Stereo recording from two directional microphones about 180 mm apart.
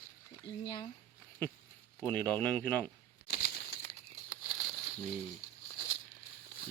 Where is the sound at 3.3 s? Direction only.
60° left (ahead or behind).